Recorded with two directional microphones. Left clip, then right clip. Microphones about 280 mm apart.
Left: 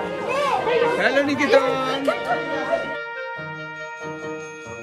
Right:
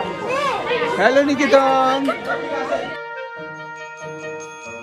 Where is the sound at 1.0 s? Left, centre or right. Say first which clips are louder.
Right 4 dB; centre.